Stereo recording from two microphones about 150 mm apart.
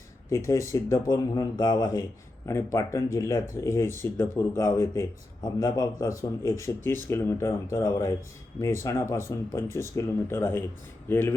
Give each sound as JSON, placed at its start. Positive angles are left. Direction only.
{"t": 0.3, "sound": "speech", "side_deg": 20}